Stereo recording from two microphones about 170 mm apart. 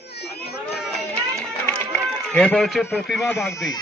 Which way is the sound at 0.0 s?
75° left (ahead or behind).